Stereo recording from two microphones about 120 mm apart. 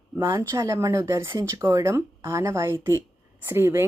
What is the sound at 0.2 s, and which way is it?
Speech, 20° right (ahead or behind).